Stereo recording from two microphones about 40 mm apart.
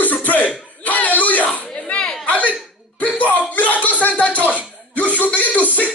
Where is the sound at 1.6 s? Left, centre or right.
Left.